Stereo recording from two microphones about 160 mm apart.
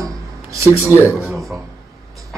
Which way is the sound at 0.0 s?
20° right (ahead or behind).